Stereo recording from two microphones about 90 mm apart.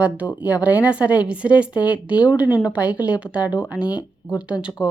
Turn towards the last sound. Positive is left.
turn(degrees=-10)  # may be behind; listen again after turning